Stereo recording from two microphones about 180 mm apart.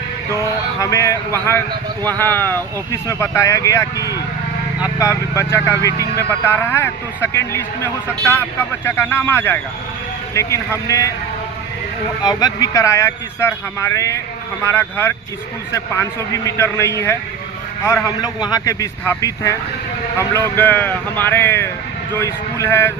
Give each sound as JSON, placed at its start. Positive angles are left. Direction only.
{"t": 0.8, "sound": "speech", "side_deg": 15}
{"t": 12.2, "sound": "speech", "side_deg": 20}